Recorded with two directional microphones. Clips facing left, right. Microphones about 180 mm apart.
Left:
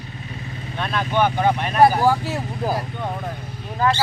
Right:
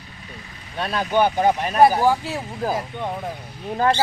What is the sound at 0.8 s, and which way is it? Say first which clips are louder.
Speech: right 1 dB; 35° right (ahead or behind).